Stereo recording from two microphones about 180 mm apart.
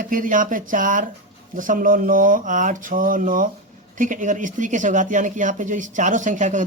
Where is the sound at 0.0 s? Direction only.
45° right (ahead or behind).